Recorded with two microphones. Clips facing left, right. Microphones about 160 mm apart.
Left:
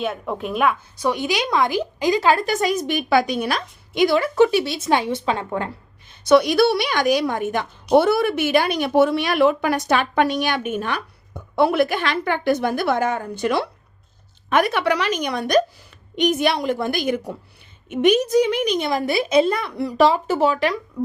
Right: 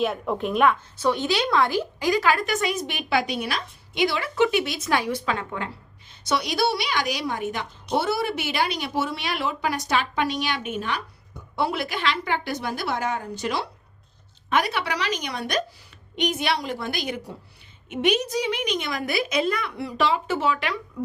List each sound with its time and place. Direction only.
0.0 s speech: centre (ahead or behind); by 5.5 s 30° left (ahead or behind)
5.5 s a woman's voice: 45° left (ahead or behind)